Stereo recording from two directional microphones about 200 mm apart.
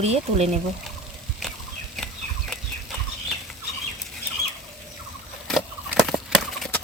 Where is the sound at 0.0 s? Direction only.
30° right (ahead or behind).